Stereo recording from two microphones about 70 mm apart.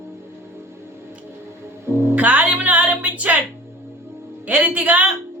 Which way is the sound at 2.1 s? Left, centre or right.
Right.